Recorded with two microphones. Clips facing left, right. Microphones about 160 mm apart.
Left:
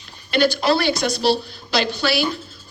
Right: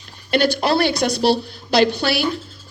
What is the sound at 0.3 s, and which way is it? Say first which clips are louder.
A woman's voice: even; 60° right (ahead or behind).